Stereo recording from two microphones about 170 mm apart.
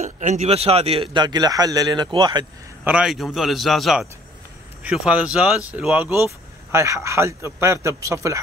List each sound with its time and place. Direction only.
0.0 s speech: 45° right (ahead or behind); by 2.4 s 25° right (ahead or behind)
2.8 s a man's voice: 5° right (ahead or behind)